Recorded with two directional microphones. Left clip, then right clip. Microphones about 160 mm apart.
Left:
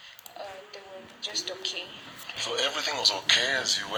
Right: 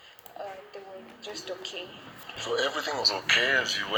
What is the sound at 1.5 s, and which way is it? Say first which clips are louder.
Speech: left 3 dB; 40° right (ahead or behind).